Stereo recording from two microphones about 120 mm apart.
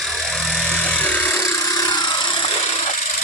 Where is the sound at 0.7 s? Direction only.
10° left (ahead or behind).